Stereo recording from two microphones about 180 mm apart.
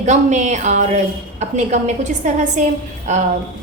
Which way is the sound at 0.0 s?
40° right (ahead or behind).